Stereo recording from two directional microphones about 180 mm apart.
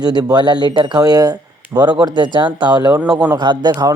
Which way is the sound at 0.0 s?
25° right (ahead or behind).